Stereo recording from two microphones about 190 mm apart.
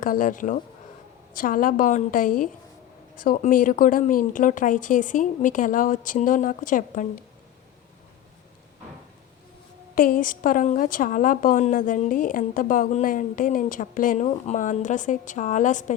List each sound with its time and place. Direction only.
0.0 s a woman's voice: 45° left (ahead or behind)
9.9 s a woman's voice: 50° left (ahead or behind)